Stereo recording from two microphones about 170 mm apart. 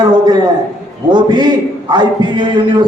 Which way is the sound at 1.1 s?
25° right (ahead or behind).